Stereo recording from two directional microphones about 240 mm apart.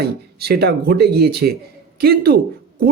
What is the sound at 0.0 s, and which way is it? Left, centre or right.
Speech, right.